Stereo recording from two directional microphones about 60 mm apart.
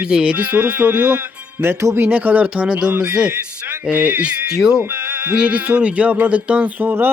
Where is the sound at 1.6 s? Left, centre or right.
Right.